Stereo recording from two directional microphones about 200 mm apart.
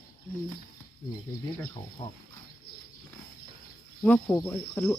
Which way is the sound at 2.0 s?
20° left (ahead or behind).